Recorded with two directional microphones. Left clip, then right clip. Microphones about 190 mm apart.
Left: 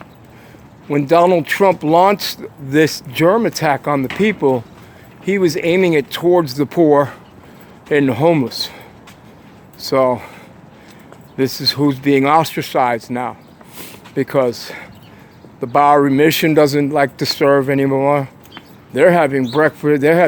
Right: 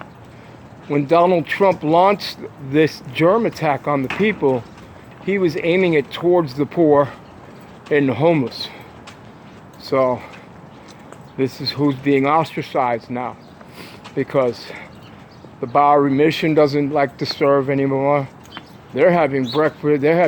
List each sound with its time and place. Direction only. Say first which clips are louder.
0.9 s speech: left 3 dB; 35° left (ahead or behind)
9.8 s speech: left 3 dB; 40° left (ahead or behind)
11.3 s speech: left 5 dB; 35° left (ahead or behind)